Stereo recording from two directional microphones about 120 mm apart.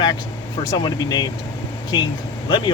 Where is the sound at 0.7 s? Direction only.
35° left (ahead or behind).